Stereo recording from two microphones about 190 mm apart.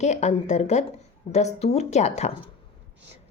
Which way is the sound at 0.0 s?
35° left (ahead or behind).